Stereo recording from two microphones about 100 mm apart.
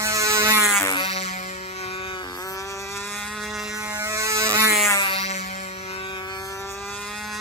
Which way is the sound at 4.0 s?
30° right (ahead or behind).